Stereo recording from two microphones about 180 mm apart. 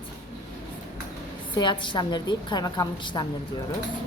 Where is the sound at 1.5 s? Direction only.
25° left (ahead or behind).